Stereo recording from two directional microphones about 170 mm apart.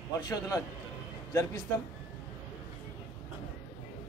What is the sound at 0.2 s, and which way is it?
Speech, 20° left (ahead or behind).